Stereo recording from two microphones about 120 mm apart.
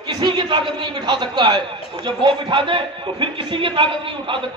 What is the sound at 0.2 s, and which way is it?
A man's voice, 40° right (ahead or behind).